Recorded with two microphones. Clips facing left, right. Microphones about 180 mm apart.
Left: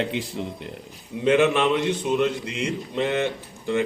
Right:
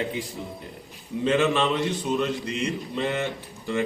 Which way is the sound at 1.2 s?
15° left (ahead or behind).